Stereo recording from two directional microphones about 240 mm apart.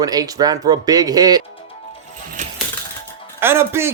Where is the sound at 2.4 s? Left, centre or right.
Right.